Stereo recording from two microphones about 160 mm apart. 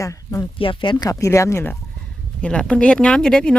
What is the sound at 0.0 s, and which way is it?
Speech, 20° left (ahead or behind).